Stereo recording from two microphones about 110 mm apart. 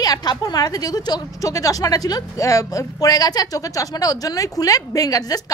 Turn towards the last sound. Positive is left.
turn(degrees=35)  # may be behind; listen again after turning